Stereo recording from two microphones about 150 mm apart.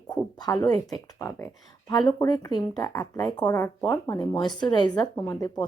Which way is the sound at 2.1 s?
25° left (ahead or behind).